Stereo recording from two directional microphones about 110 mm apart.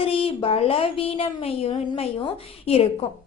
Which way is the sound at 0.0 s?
55° left (ahead or behind).